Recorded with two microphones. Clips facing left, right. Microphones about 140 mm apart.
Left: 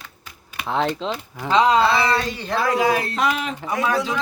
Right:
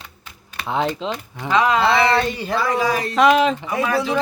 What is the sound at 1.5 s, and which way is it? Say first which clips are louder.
Speech: left 1 dB; 30° left (ahead or behind).